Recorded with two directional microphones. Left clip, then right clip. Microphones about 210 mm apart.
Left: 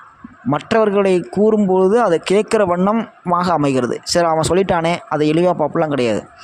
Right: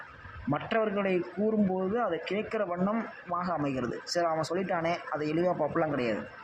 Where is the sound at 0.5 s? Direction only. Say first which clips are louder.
Left 14 dB; 50° left (ahead or behind).